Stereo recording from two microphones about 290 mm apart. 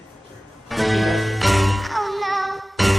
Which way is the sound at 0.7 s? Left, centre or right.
Centre.